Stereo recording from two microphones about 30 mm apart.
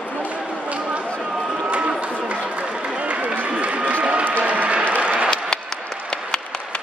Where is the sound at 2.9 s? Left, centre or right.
Right.